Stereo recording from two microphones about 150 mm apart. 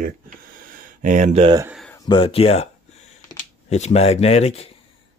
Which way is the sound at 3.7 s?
45° left (ahead or behind).